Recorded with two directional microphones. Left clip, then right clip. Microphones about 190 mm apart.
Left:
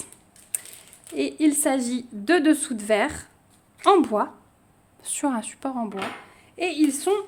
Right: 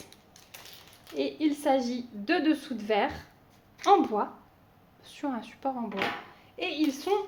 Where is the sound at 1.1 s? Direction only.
60° left (ahead or behind).